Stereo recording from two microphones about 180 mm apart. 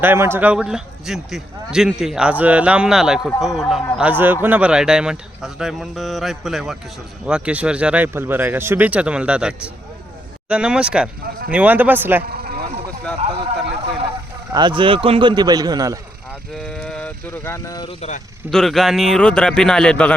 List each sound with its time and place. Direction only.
0.0 s a man's voice: 10° right (ahead or behind)
12.2 s vehicle: 60° right (ahead or behind)
13.2 s a sound: 35° right (ahead or behind)
14.5 s a man's voice: 25° right (ahead or behind)
16.6 s speech: 5° left (ahead or behind)
17.8 s speech: 35° left (ahead or behind)
18.5 s a man's voice: centre (ahead or behind)